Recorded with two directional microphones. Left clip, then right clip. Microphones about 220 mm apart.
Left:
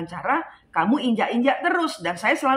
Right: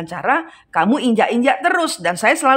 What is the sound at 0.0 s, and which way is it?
A woman's voice, 45° right (ahead or behind).